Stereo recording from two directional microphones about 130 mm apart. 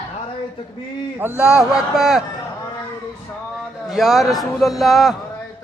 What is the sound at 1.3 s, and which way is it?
Speech, 20° left (ahead or behind).